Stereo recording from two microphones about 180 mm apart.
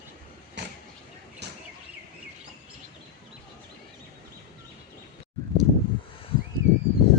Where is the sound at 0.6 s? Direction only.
70° right (ahead or behind).